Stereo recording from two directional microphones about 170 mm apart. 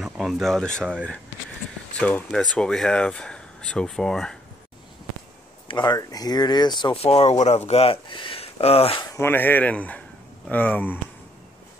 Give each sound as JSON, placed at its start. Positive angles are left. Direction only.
{"t": 0.0, "sound": "speech", "side_deg": 0}
{"t": 2.0, "sound": "speech", "side_deg": 10}
{"t": 5.7, "sound": "speech", "side_deg": 25}
{"t": 9.0, "sound": "speech", "side_deg": 15}